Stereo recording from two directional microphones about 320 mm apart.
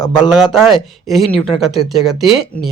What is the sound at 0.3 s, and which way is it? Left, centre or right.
Speech, centre.